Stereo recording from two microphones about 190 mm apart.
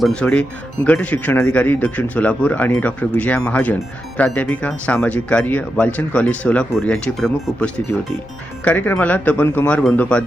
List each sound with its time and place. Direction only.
0.0 s speech: 5° left (ahead or behind)